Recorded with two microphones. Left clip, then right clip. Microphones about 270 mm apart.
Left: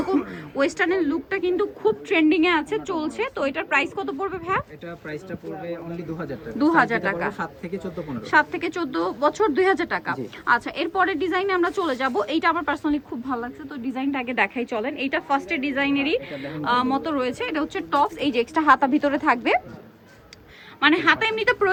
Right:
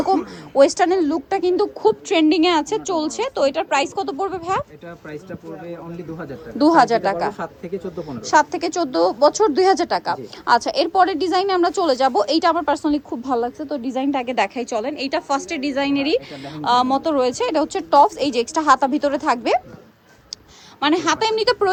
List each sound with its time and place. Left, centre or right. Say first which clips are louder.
0.1 s a sound: right 6 dB; right
1.3 s a woman's voice: right 5 dB; right
6.6 s a woman's voice: right 5 dB; right
20.8 s a woman's voice: even; centre